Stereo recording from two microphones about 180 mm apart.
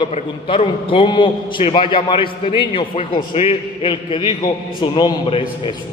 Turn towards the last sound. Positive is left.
turn(degrees=30)  # may be behind; listen again after turning